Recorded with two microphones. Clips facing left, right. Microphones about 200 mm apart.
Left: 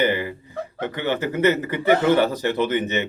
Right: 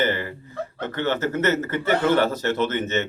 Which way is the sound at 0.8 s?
15° left (ahead or behind).